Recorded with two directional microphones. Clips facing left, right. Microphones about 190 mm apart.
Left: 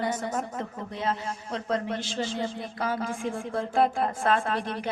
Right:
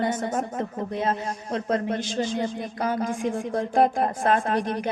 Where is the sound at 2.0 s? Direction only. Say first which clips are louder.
Right 4 dB; 15° right (ahead or behind).